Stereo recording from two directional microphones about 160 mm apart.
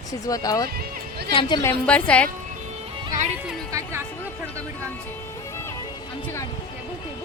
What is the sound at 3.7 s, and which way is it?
Music, 20° right (ahead or behind).